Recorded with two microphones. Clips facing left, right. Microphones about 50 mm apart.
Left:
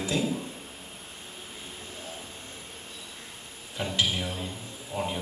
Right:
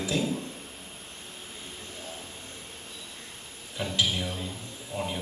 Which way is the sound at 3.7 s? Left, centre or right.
Centre.